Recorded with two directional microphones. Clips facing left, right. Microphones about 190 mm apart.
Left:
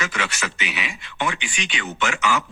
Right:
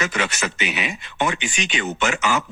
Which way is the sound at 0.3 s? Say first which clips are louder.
Right 3 dB; 20° right (ahead or behind).